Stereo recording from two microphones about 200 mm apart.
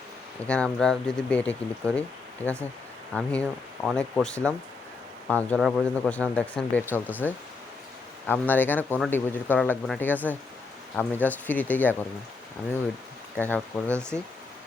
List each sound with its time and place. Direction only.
0.4 s speech: 5° left (ahead or behind)
13.3 s speech: 10° left (ahead or behind)